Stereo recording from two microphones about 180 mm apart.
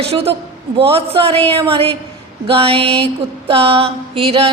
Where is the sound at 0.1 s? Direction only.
35° right (ahead or behind).